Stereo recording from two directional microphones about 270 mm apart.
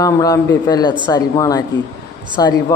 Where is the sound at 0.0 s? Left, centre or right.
Centre.